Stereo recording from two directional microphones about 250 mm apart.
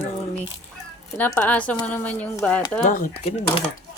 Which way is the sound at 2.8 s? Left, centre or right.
Left.